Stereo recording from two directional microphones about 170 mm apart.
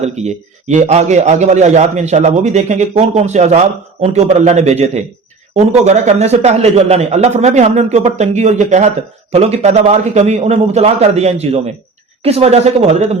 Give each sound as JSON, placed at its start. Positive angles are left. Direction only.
{"t": 0.0, "sound": "a man's voice", "side_deg": -40}